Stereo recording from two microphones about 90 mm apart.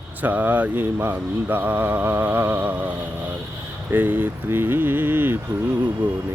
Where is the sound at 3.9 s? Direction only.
20° right (ahead or behind).